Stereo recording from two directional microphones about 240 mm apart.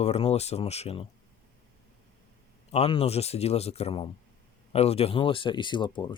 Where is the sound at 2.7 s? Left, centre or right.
Left.